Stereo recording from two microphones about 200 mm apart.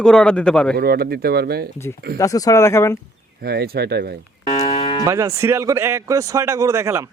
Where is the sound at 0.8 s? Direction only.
50° right (ahead or behind).